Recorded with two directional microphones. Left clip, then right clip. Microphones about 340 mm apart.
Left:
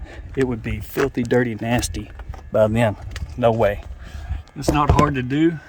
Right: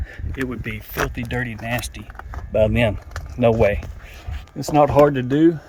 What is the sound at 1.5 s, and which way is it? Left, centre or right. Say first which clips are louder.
Speech: left 3 dB; left.